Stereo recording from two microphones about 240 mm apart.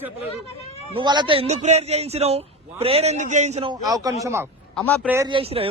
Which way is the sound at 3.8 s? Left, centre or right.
Centre.